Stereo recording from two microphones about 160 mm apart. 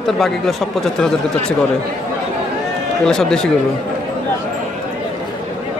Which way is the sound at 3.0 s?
5° left (ahead or behind).